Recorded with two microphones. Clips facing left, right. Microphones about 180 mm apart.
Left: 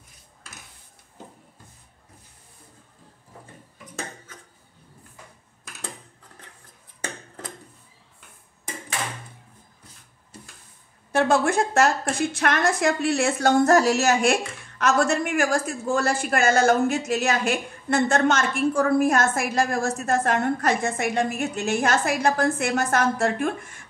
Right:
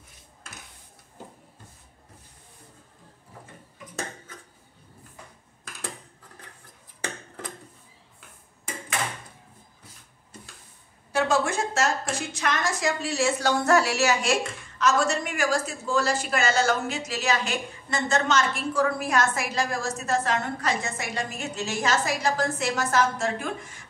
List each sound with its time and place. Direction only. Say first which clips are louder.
11.1 s a woman's voice: left 4 dB; 55° left (ahead or behind)